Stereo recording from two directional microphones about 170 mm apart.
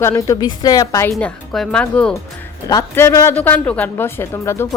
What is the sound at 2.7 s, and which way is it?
Speech, 15° left (ahead or behind).